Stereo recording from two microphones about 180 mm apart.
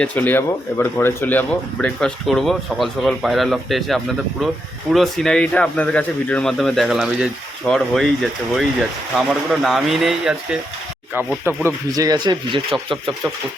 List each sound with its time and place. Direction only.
0.0 s speech: 10° left (ahead or behind)
11.4 s speech: 15° right (ahead or behind)